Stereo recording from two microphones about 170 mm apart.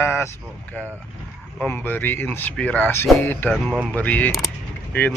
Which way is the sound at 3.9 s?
10° left (ahead or behind).